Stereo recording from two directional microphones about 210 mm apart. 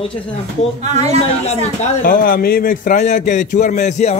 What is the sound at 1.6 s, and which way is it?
A man's voice, 40° left (ahead or behind).